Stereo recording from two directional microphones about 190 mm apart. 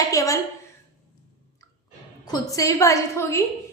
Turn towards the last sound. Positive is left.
turn(degrees=15)  # may be behind; listen again after turning